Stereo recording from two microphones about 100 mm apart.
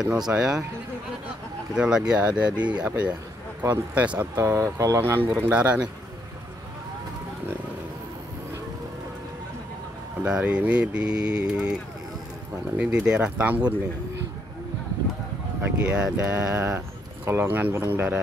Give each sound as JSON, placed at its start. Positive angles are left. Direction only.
{"t": 0.3, "sound": "speech", "side_deg": -5}
{"t": 1.8, "sound": "speech", "side_deg": -5}
{"t": 4.4, "sound": "speech", "side_deg": -25}
{"t": 10.2, "sound": "speech", "side_deg": -10}
{"t": 12.7, "sound": "speech", "side_deg": -10}
{"t": 15.6, "sound": "speech", "side_deg": -10}
{"t": 16.7, "sound": "speech", "side_deg": -20}